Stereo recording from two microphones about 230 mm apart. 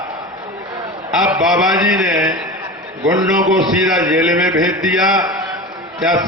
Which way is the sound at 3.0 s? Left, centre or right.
Centre.